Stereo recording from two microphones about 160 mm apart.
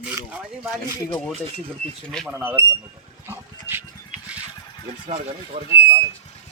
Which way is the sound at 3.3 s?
15° right (ahead or behind).